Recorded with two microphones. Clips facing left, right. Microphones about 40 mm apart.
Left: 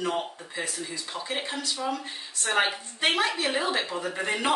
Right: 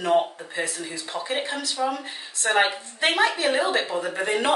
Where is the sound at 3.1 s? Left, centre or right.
Right.